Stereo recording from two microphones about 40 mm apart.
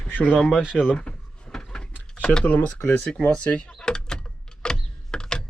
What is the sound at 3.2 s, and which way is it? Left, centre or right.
Speech, left.